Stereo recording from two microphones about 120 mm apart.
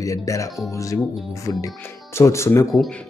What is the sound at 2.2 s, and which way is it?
Speech, 25° left (ahead or behind).